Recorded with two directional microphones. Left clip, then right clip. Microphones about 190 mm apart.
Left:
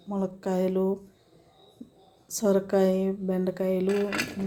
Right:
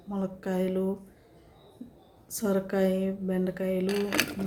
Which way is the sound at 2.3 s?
25° left (ahead or behind).